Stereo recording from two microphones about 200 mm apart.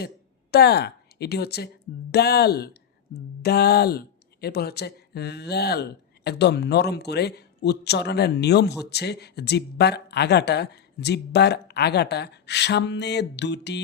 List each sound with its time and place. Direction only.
0.5 s speech: 55° left (ahead or behind)